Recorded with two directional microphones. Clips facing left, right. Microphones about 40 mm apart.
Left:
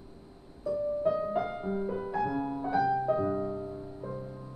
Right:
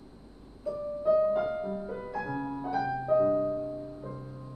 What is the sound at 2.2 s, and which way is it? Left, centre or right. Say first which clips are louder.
Music: left 2 dB; centre.